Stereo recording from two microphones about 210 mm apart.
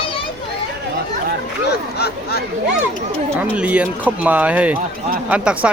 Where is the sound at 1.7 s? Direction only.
50° left (ahead or behind).